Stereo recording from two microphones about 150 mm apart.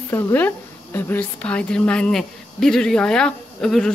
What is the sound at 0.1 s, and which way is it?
A woman's voice, 15° left (ahead or behind).